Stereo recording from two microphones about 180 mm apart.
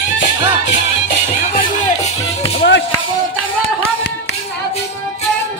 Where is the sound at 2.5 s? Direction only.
70° left (ahead or behind).